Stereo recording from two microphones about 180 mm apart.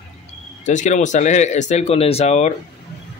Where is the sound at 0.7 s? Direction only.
45° left (ahead or behind).